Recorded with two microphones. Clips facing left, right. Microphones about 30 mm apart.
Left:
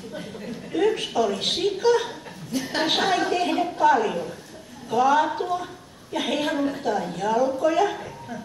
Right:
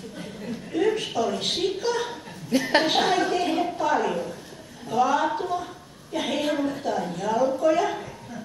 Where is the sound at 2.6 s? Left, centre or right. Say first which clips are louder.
Right 5 dB; right.